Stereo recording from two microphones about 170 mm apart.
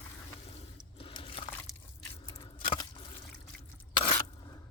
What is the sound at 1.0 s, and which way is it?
Liquid, 30° left (ahead or behind).